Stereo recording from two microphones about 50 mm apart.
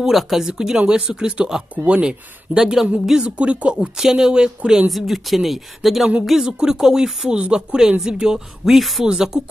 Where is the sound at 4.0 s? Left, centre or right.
Centre.